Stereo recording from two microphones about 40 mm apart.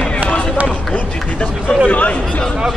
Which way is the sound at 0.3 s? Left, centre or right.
Left.